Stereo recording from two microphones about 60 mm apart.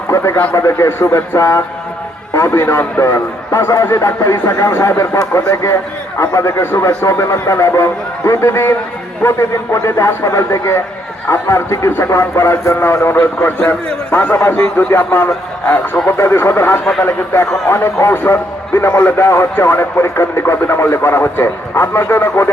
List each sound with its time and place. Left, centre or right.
0.1 s a man's voice: left
1.4 s a man's voice: left
4.7 s a man's voice: left
13.7 s a man's voice: left
16.0 s a man's voice: left